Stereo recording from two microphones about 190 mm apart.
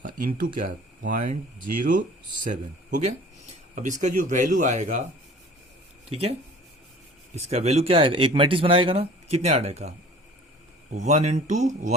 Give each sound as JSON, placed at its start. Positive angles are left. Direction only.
{"t": 0.0, "sound": "speech", "side_deg": -45}
{"t": 6.1, "sound": "speech", "side_deg": -30}
{"t": 7.5, "sound": "speech", "side_deg": -35}
{"t": 10.9, "sound": "speech", "side_deg": -35}